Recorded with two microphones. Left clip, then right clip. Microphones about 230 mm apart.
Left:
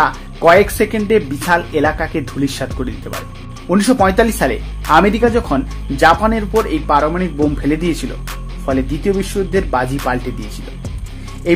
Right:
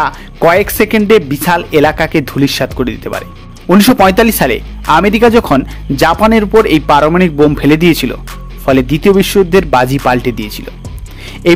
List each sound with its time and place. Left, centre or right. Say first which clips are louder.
0.0 s speech: right 2 dB; right
3.1 s speech: right 4 dB; centre
3.6 s speech: right 6 dB; right